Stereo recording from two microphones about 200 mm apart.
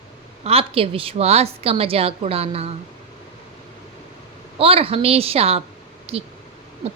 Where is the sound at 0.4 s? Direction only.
30° right (ahead or behind).